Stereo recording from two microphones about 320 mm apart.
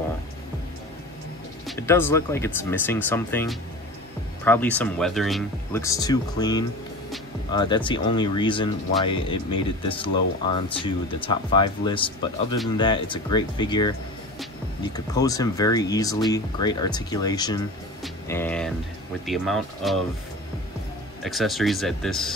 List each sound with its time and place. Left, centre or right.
1.7 s speech: centre
21.2 s speech: centre